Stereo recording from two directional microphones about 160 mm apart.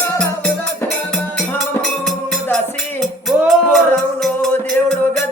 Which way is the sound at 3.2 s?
Centre (ahead or behind).